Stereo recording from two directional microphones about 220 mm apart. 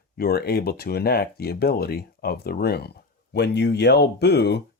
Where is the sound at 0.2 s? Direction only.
45° left (ahead or behind).